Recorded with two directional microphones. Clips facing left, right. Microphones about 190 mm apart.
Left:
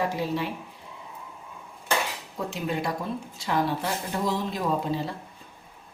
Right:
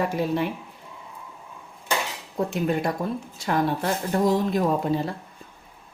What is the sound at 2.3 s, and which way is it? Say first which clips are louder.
A woman's voice: right 6 dB; 50° right (ahead or behind).